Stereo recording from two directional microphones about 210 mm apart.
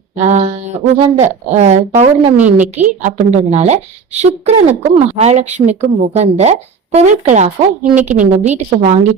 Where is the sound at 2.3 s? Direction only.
10° right (ahead or behind).